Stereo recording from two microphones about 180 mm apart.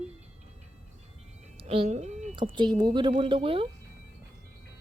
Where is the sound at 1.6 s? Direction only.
30° right (ahead or behind).